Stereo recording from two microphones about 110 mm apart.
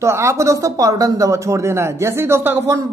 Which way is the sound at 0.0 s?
25° right (ahead or behind).